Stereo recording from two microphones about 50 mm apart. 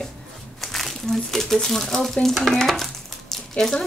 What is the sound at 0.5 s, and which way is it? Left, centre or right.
Speech, centre.